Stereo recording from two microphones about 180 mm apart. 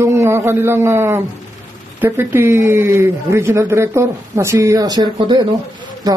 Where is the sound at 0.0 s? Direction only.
15° right (ahead or behind).